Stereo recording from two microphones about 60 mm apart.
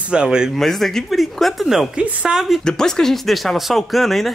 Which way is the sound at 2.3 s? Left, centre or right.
Centre.